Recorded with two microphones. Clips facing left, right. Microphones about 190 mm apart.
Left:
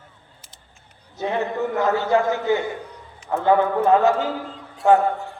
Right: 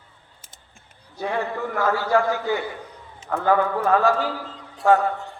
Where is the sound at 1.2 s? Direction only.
20° left (ahead or behind).